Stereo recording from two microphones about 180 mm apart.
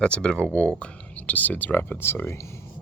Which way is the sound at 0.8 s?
5° left (ahead or behind).